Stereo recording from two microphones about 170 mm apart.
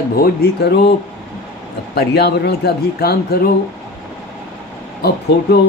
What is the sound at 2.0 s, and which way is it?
Speech, 70° left (ahead or behind).